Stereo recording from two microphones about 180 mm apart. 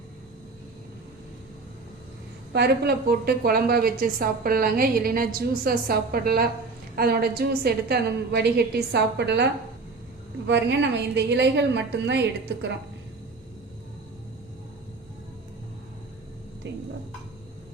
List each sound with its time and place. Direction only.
2.5 s a woman's voice: 65° right (ahead or behind)
16.6 s dishes: 75° right (ahead or behind)